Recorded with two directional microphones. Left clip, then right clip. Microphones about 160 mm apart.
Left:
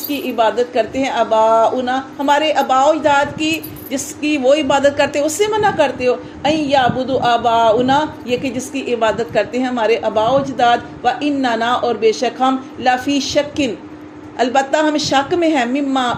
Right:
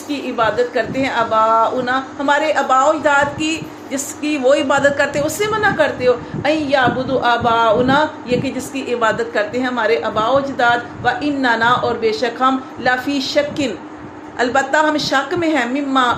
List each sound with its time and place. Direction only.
0.1 s a woman's voice: 45° left (ahead or behind)